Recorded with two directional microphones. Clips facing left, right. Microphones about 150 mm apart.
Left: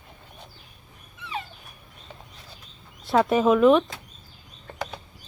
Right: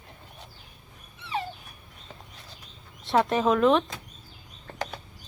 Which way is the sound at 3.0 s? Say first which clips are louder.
Left 3 dB; centre (ahead or behind).